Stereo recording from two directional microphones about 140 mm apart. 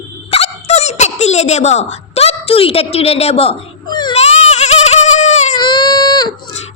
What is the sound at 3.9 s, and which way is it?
Speech, 30° left (ahead or behind).